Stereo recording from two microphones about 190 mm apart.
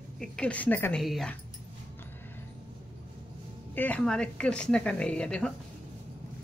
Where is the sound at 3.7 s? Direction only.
10° left (ahead or behind).